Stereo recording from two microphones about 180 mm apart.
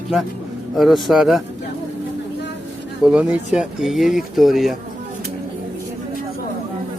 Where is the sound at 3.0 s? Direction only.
5° right (ahead or behind).